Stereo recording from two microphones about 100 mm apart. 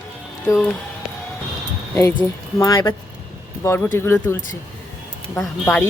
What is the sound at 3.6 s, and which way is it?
Speech, 25° left (ahead or behind).